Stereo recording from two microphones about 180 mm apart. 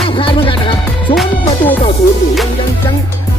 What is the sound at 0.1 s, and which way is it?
Music, 30° left (ahead or behind).